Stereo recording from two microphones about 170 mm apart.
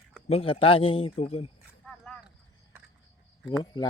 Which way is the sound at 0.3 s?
35° left (ahead or behind).